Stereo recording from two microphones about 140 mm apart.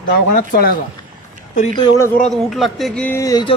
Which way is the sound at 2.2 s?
Centre (ahead or behind).